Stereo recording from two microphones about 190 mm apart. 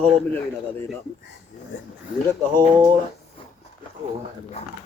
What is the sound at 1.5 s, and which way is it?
Speech, 40° left (ahead or behind).